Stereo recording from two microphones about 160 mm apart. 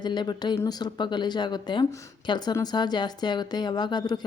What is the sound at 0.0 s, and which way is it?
Speech, 30° left (ahead or behind).